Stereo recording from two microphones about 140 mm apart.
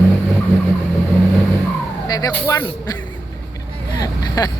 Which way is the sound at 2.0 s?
25° left (ahead or behind).